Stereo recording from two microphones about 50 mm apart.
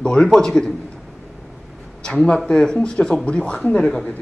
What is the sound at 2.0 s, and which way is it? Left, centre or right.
A man's voice, centre.